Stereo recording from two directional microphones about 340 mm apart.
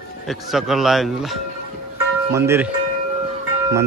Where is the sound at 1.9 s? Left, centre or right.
Centre.